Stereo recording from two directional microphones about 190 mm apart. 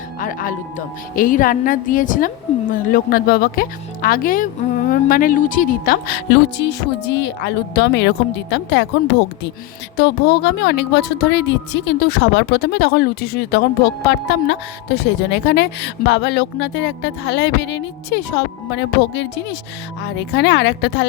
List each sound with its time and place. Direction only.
0.2 s a woman's voice: 45° left (ahead or behind); by 21.0 s 65° left (ahead or behind)